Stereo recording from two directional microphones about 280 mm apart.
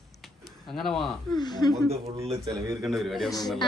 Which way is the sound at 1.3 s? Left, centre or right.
Centre.